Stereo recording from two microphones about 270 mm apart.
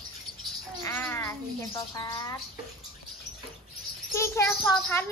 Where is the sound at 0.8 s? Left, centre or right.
Centre.